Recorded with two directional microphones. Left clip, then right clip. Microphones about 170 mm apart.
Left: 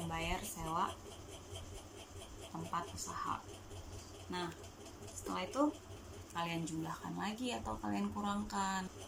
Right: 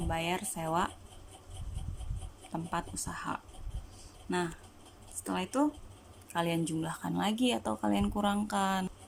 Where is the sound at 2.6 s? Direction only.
55° right (ahead or behind).